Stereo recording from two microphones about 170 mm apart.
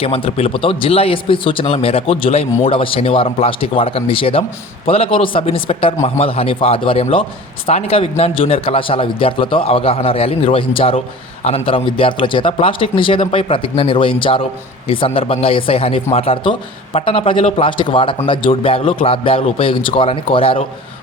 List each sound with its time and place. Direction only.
0.0 s speech: 35° left (ahead or behind)